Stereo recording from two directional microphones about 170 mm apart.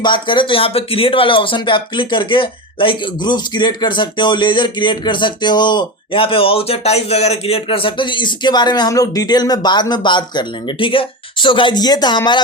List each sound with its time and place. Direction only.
0.0 s speech: 30° left (ahead or behind)